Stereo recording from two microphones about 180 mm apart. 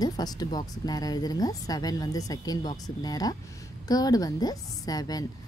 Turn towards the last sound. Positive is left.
turn(degrees=20)  # may be behind; listen again after turning